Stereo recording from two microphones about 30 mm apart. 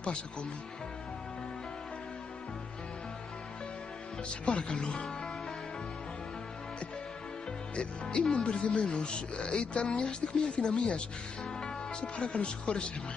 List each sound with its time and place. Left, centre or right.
0.0 s speech: left
4.3 s speech: left
7.7 s speech: left
8.8 s speech: left